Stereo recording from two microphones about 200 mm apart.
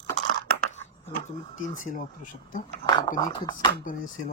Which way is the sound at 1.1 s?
40° left (ahead or behind).